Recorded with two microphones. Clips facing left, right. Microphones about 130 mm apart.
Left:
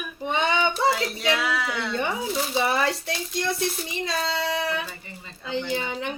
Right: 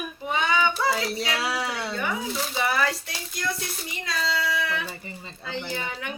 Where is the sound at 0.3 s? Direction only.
25° left (ahead or behind).